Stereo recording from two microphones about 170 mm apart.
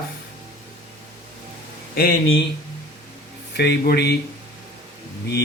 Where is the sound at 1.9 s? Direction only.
65° left (ahead or behind).